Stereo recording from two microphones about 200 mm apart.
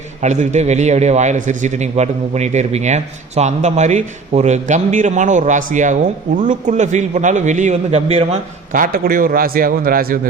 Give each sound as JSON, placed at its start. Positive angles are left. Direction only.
{"t": 0.2, "sound": "a man's voice", "side_deg": -35}